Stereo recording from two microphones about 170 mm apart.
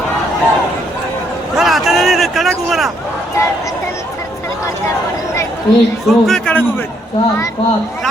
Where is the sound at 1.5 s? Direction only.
Centre (ahead or behind).